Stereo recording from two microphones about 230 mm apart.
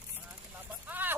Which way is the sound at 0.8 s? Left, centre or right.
Centre.